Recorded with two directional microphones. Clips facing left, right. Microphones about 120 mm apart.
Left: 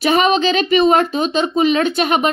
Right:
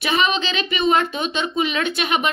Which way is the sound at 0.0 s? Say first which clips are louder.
Left 7 dB; 40° left (ahead or behind).